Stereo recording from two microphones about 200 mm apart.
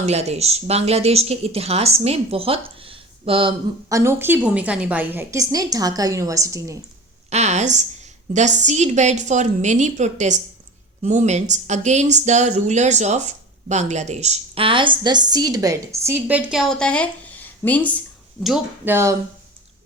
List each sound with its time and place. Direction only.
0.0 s speech: 35° right (ahead or behind)
3.8 s a woman's voice: 15° right (ahead or behind)
7.3 s speech: 35° right (ahead or behind); by 18.9 s centre (ahead or behind)